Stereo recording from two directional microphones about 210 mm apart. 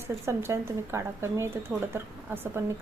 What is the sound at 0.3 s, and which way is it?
Speech, 10° right (ahead or behind).